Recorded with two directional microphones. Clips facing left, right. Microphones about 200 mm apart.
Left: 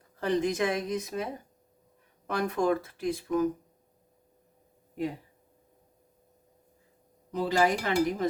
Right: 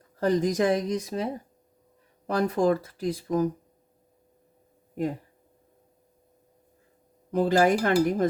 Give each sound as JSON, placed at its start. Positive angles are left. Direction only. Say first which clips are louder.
{"t": 0.2, "sound": "speech", "louder": "right 4 dB", "side_deg": -40}
{"t": 7.3, "sound": "dishes", "louder": "right 5 dB", "side_deg": -55}